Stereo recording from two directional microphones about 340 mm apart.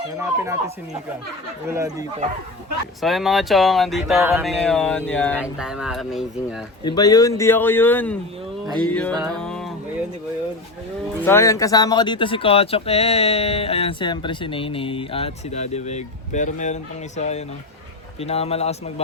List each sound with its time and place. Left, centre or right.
0.2 s speech: centre
1.6 s speech: centre
6.8 s speech: centre
9.3 s music: centre
11.3 s speech: centre